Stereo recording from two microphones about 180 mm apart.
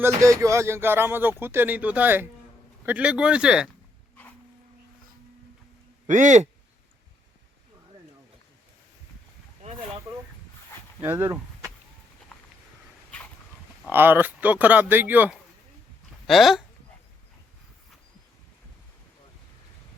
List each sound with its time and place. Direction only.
0.0 s speech: 15° right (ahead or behind)
6.1 s a man's voice: 45° right (ahead or behind)
11.0 s speech: 15° right (ahead or behind)
13.9 s speech: 10° right (ahead or behind)